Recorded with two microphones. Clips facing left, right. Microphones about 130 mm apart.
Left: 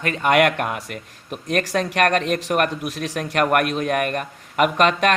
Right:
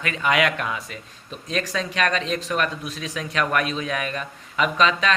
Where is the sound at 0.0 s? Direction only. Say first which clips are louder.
Left 4 dB; 45° left (ahead or behind).